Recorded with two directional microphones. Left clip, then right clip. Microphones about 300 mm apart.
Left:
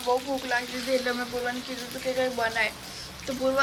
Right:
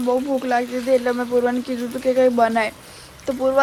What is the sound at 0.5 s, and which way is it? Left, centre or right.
Speech, centre.